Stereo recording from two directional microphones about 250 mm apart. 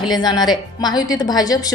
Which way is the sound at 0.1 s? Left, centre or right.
Centre.